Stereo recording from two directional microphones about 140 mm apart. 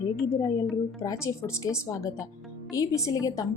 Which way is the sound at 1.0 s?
25° left (ahead or behind).